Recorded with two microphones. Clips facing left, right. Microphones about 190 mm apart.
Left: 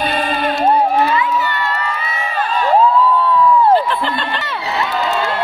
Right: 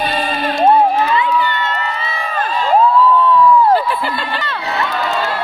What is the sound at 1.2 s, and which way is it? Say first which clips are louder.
Crowd: right 1 dB; 25° right (ahead or behind).